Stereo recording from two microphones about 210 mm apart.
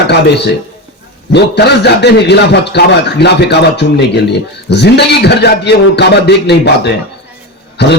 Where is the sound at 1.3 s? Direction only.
55° left (ahead or behind).